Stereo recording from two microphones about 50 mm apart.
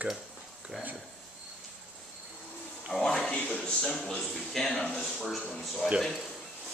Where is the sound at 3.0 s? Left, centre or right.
Centre.